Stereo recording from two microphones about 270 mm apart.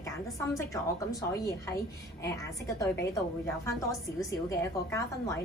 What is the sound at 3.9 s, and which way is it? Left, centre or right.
A woman's voice, centre.